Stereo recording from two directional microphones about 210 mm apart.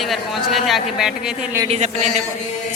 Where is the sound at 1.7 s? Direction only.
30° right (ahead or behind).